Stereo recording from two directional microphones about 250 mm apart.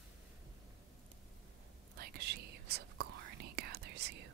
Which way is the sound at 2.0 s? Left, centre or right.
Right.